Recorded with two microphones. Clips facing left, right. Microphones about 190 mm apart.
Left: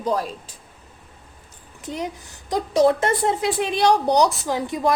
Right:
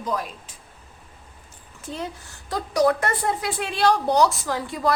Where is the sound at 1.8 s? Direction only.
15° left (ahead or behind).